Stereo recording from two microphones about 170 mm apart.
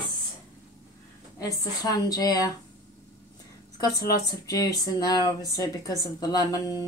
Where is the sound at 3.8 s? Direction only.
20° left (ahead or behind).